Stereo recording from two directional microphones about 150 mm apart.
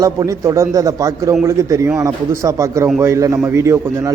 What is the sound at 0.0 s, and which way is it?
A man's voice, 20° right (ahead or behind).